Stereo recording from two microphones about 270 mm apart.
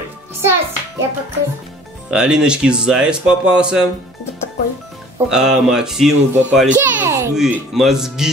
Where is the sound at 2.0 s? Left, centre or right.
Centre.